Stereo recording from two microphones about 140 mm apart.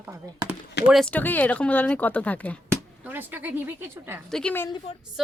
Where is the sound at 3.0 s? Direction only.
15° right (ahead or behind).